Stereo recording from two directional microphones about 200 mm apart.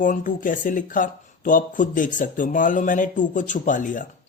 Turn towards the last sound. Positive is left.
turn(degrees=40)  # may be behind; listen again after turning